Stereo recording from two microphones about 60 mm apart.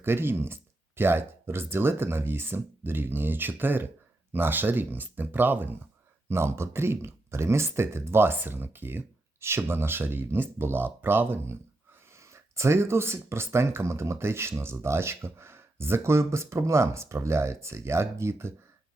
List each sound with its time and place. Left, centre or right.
0.0 s speech: right
6.2 s speech: right
12.3 s speech: right